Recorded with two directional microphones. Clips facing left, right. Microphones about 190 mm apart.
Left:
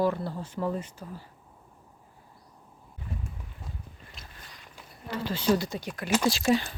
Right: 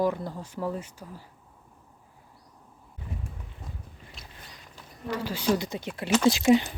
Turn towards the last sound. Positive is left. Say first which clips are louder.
# right 5 dB
turn(degrees=-20)  # may be behind; listen again after turning